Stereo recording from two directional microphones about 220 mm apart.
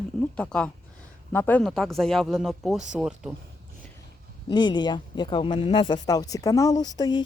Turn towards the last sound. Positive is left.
turn(degrees=20)  # may be behind; listen again after turning